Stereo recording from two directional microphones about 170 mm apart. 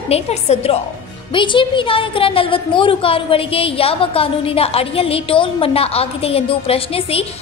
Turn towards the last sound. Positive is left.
turn(degrees=35)  # may be behind; listen again after turning